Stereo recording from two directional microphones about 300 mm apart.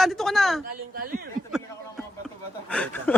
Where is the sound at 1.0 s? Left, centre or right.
Right.